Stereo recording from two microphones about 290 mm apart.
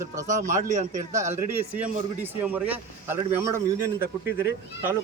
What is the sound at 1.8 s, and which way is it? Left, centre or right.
A man's voice, centre.